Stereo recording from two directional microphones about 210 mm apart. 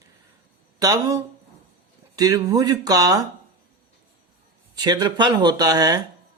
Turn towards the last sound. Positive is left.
turn(degrees=-20)  # may be behind; listen again after turning